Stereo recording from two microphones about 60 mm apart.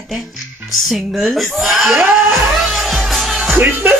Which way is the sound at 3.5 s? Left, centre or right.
Right.